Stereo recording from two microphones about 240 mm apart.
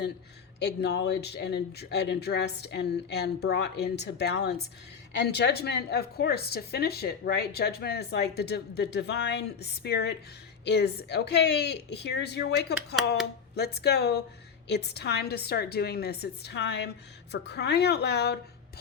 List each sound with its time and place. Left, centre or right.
0.6 s a woman's voice: left